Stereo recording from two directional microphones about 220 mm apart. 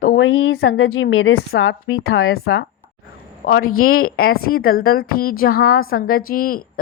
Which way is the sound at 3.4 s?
40° left (ahead or behind).